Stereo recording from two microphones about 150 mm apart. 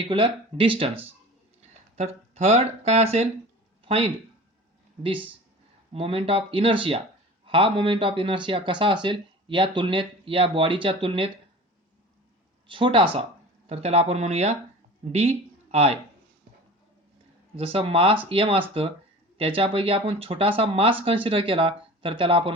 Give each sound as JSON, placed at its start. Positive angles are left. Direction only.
{"t": 0.1, "sound": "a man's voice", "side_deg": -35}
{"t": 2.0, "sound": "a man's voice", "side_deg": -45}
{"t": 12.6, "sound": "a man's voice", "side_deg": -35}
{"t": 17.6, "sound": "a man's voice", "side_deg": -40}